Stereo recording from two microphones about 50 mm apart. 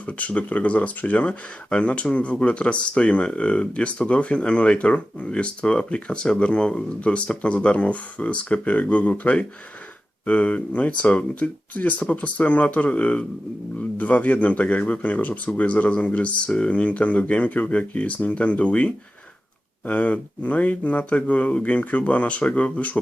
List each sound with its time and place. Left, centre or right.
0.0 s speech: left